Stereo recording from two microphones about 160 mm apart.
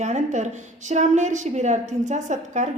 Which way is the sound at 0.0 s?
45° right (ahead or behind).